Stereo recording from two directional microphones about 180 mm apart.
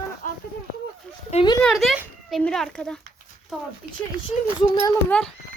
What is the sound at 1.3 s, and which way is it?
Speech, 25° left (ahead or behind).